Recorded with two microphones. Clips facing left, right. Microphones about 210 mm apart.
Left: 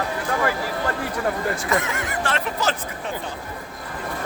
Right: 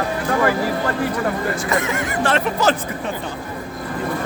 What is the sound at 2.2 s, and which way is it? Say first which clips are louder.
Speech: right 7 dB; 60° right (ahead or behind).